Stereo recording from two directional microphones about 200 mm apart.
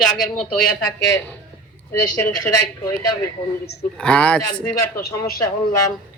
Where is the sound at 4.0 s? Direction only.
5° left (ahead or behind).